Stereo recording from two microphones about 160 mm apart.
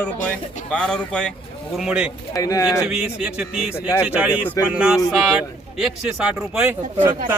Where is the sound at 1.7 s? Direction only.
5° right (ahead or behind).